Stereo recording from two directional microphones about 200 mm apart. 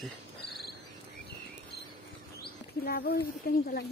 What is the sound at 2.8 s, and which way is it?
Speech, 50° left (ahead or behind).